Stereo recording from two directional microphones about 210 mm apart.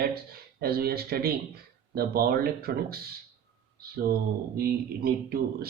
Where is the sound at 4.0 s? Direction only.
45° right (ahead or behind).